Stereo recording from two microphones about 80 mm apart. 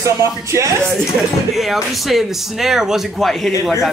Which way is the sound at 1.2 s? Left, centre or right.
Centre.